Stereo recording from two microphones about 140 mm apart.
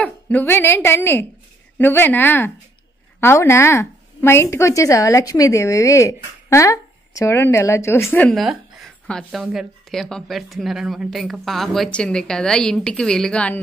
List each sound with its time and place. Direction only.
0.0 s a woman's voice: 10° left (ahead or behind)
8.4 s speech: centre (ahead or behind)